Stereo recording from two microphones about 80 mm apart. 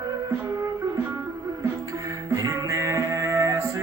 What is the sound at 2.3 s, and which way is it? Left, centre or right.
Music, right.